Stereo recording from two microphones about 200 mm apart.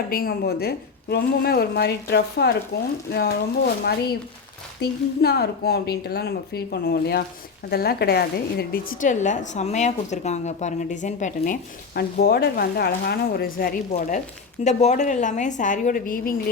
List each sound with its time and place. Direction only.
0.1 s a woman's voice: 45° left (ahead or behind)
4.8 s a woman's voice: 55° left (ahead or behind)
11.9 s a woman's voice: 50° left (ahead or behind)